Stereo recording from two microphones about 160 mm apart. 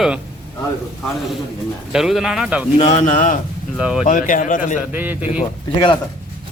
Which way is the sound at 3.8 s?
5° right (ahead or behind).